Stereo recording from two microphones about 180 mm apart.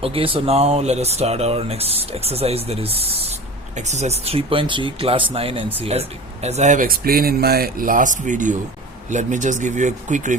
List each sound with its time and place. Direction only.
0.0 s speech: 30° right (ahead or behind)